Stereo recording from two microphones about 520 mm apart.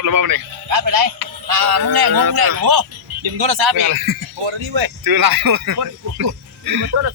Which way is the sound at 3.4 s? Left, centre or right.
Right.